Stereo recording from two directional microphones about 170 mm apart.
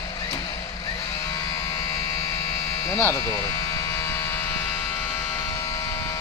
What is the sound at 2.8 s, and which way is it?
Speech, 15° left (ahead or behind).